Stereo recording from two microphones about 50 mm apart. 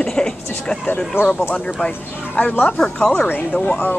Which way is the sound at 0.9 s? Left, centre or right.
Left.